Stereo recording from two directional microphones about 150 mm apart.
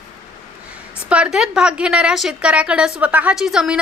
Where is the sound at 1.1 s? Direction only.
5° right (ahead or behind).